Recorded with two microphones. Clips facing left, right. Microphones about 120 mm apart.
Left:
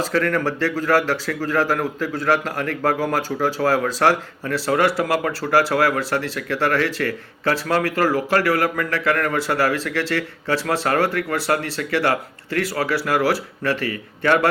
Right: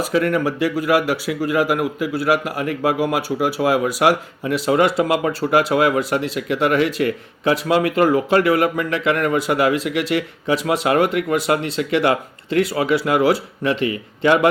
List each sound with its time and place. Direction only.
0.0 s speech: 15° right (ahead or behind)